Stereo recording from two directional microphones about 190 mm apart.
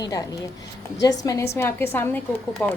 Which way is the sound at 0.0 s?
20° left (ahead or behind).